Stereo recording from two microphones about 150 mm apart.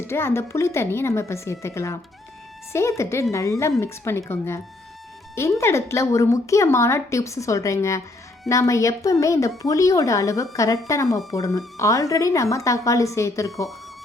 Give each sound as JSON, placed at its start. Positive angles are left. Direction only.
{"t": 0.0, "sound": "speech", "side_deg": 15}
{"t": 3.0, "sound": "speech", "side_deg": 20}